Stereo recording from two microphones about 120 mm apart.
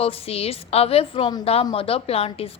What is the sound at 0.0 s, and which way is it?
A woman's voice, 55° left (ahead or behind).